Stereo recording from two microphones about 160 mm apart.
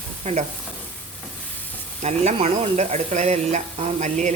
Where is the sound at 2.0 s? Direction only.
45° right (ahead or behind).